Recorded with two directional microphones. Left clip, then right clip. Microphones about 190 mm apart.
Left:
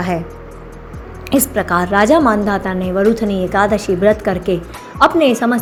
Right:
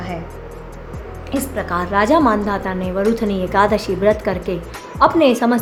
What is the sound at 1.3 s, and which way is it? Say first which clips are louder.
A woman's voice: left 6 dB; 30° left (ahead or behind).